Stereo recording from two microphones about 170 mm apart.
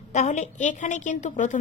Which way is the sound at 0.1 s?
45° left (ahead or behind).